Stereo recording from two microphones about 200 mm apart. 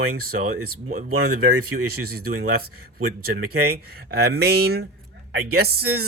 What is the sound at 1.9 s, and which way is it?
Speech, 50° right (ahead or behind).